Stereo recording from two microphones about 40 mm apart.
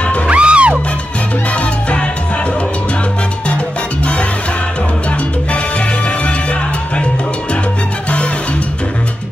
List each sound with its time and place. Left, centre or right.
0.3 s music: right